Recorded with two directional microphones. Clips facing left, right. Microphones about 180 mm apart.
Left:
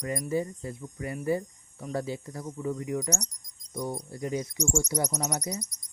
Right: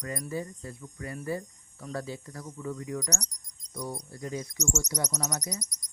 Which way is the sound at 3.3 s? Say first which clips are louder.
Left 1 dB; 10° left (ahead or behind).